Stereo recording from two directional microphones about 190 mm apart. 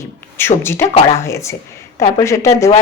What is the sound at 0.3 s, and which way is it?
Speech, 15° left (ahead or behind).